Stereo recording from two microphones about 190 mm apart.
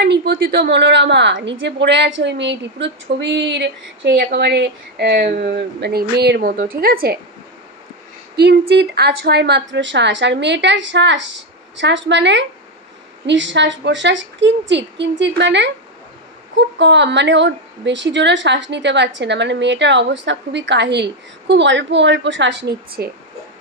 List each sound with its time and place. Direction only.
0.0 s a woman's voice: 55° right (ahead or behind)
8.4 s a woman's voice: 60° right (ahead or behind)